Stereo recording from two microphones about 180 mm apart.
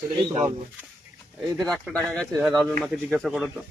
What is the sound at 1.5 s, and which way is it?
Speech, centre (ahead or behind).